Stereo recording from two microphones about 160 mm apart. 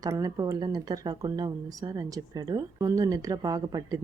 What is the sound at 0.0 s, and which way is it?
Speech, 20° right (ahead or behind).